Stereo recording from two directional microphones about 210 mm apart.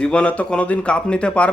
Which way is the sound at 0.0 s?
5° left (ahead or behind).